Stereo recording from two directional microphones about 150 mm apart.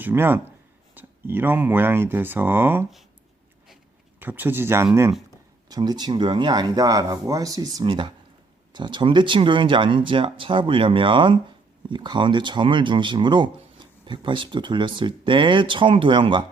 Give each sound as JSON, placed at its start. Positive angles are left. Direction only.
{"t": 0.0, "sound": "speech", "side_deg": -15}
{"t": 4.2, "sound": "speech", "side_deg": -15}
{"t": 5.6, "sound": "speech", "side_deg": -25}